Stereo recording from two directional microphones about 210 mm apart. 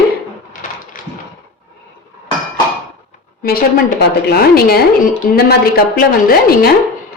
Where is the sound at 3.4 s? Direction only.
45° left (ahead or behind).